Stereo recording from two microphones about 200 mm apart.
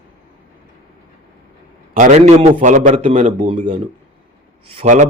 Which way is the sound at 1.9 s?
40° right (ahead or behind).